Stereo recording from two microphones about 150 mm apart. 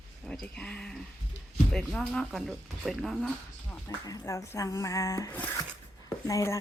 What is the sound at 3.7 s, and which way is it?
Speech, 20° left (ahead or behind).